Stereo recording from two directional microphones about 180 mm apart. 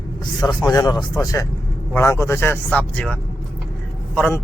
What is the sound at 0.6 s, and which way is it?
Speech, 20° left (ahead or behind).